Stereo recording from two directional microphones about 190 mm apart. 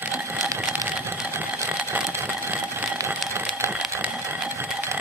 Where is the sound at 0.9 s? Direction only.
10° right (ahead or behind).